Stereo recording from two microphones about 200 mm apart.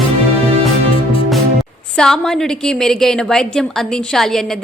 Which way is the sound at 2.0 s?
5° left (ahead or behind).